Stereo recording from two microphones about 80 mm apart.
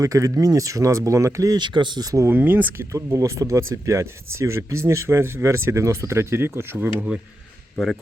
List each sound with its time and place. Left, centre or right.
0.0 s speech: right
1.5 s speech: right
2.2 s speech: right
2.9 s speech: right